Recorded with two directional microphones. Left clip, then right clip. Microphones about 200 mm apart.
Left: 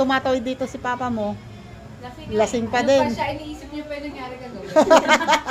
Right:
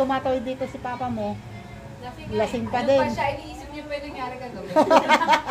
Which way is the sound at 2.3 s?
20° left (ahead or behind).